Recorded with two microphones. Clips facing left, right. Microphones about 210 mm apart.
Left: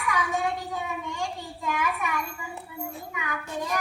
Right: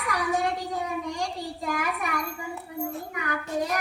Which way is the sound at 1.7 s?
35° right (ahead or behind).